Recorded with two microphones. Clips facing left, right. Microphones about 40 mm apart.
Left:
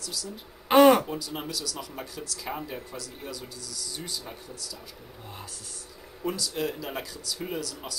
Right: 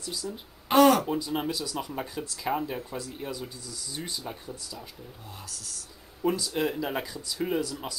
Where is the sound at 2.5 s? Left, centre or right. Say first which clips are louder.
Right 6 dB; centre.